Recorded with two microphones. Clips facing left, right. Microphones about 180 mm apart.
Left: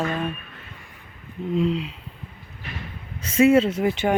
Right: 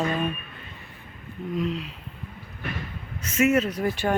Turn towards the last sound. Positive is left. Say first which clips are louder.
# left 4 dB
turn(degrees=20)  # may be behind; listen again after turning